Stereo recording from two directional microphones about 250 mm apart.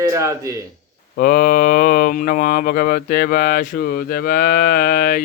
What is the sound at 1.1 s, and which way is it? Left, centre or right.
Speech, left.